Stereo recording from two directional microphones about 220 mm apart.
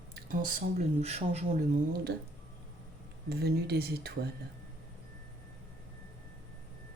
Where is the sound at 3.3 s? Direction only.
45° right (ahead or behind).